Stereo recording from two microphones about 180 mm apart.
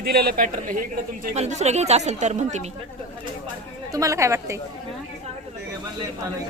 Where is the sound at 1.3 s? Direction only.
40° right (ahead or behind).